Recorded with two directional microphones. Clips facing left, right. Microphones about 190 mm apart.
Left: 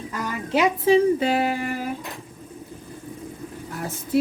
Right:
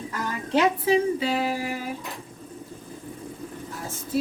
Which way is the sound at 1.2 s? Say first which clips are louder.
Left 3 dB; 60° left (ahead or behind).